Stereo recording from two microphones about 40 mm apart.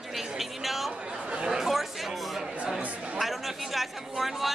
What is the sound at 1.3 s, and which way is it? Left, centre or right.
Chatter, centre.